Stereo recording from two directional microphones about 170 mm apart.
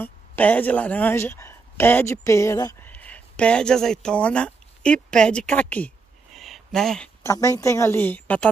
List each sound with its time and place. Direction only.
0.0 s speech: 10° left (ahead or behind)
7.2 s a woman's voice: 20° left (ahead or behind)